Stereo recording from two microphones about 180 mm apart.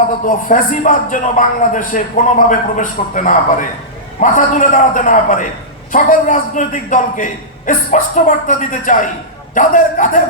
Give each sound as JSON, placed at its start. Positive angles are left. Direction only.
{"t": 0.3, "sound": "speech", "side_deg": 45}